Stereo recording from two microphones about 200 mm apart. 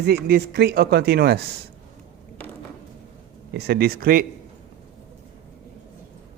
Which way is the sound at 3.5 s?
50° right (ahead or behind).